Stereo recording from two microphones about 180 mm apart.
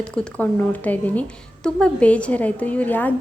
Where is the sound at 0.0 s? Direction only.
5° left (ahead or behind).